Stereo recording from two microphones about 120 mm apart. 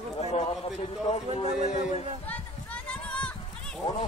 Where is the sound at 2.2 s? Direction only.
10° left (ahead or behind).